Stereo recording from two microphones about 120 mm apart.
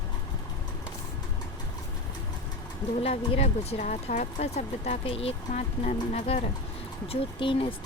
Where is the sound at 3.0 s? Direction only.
55° left (ahead or behind).